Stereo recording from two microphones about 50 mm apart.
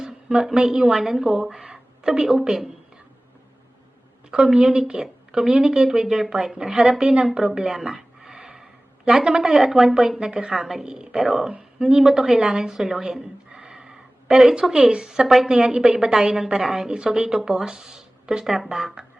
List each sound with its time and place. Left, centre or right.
0.0 s a woman's voice: centre
1.5 s a sound: centre
4.4 s a woman's voice: centre